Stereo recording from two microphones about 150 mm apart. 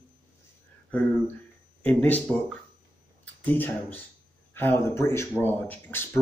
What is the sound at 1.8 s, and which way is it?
A man's voice, 10° left (ahead or behind).